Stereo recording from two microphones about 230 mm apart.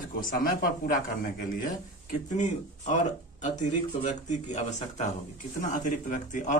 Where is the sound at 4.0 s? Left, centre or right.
Left.